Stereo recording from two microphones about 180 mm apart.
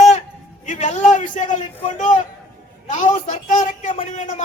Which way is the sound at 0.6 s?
40° left (ahead or behind).